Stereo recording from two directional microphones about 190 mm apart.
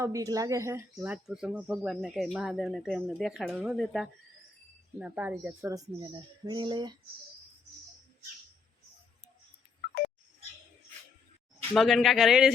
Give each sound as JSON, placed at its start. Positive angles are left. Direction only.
{"t": 0.0, "sound": "speech", "side_deg": -15}
{"t": 11.7, "sound": "speech", "side_deg": 0}